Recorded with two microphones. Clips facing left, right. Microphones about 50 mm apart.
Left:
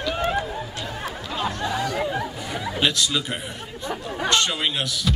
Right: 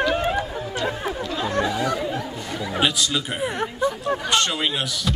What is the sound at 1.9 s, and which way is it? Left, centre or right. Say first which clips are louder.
Speech: left 1 dB; centre.